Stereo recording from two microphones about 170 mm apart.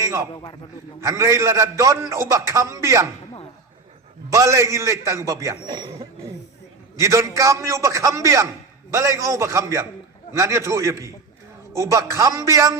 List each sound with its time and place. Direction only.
0.0 s a man's voice: 15° right (ahead or behind)
4.3 s a man's voice: 20° right (ahead or behind)